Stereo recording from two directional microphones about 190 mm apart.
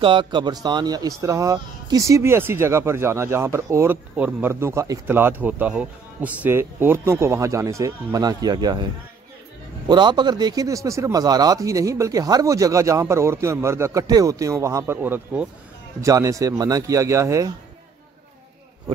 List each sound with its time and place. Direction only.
0.0 s speech: 25° right (ahead or behind)
9.8 s speech: 25° right (ahead or behind)